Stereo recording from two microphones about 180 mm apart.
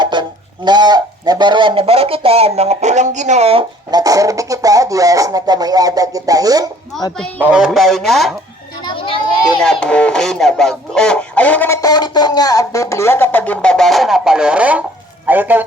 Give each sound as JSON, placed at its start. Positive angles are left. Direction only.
{"t": 0.0, "sound": "speech", "side_deg": -25}
{"t": 6.9, "sound": "speech", "side_deg": 0}
{"t": 8.8, "sound": "a sound", "side_deg": 30}
{"t": 9.6, "sound": "speech", "side_deg": 5}